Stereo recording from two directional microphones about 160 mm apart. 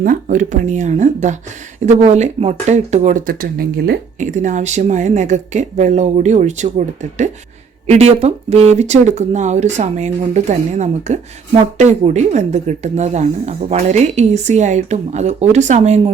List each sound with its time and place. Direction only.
0.0 s speech: 55° right (ahead or behind); by 3.9 s 75° right (ahead or behind)
4.2 s speech: 50° right (ahead or behind)